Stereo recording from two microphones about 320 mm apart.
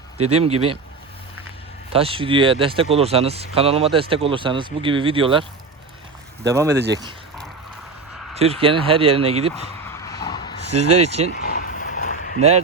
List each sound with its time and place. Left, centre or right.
0.3 s speech: centre
1.9 s speech: centre
6.7 s speech: right
8.4 s speech: centre
9.8 s a sound: centre
10.7 s speech: right
10.9 s speech: centre
11.3 s a sound: left